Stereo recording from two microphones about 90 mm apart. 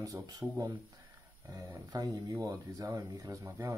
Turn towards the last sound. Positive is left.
turn(degrees=-35)  # may be behind; listen again after turning